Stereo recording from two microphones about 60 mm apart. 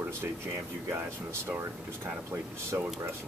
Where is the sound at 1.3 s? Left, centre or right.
Right.